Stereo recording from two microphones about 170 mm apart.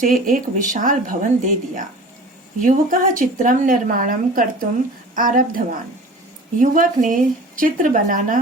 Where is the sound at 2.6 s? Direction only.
50° right (ahead or behind).